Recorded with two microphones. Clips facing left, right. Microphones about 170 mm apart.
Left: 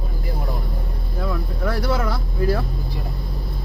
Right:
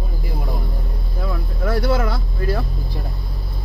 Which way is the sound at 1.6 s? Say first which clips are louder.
Right 3 dB; 5° right (ahead or behind).